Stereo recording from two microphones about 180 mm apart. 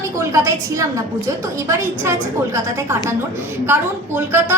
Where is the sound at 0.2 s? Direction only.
15° right (ahead or behind).